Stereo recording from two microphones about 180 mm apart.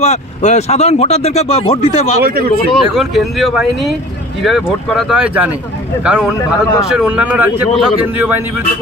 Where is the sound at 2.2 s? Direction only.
55° right (ahead or behind).